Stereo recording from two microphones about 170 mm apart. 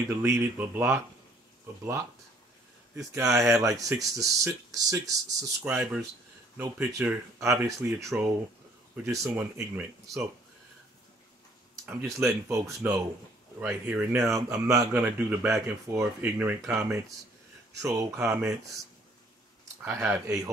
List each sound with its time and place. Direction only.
0.1 s speech: 10° right (ahead or behind)
3.2 s speech: 15° right (ahead or behind)
11.8 s speech: 5° right (ahead or behind)
12.3 s speech: 15° right (ahead or behind)
14.3 s speech: 20° right (ahead or behind)
19.8 s speech: 10° right (ahead or behind)